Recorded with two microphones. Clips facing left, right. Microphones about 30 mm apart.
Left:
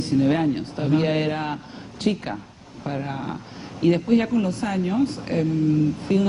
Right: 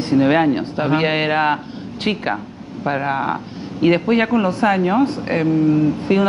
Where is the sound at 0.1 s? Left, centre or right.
Right.